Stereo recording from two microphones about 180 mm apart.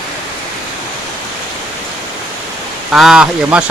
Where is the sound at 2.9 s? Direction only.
5° right (ahead or behind).